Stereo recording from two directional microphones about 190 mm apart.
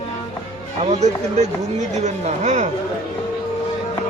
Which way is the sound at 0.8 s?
35° right (ahead or behind).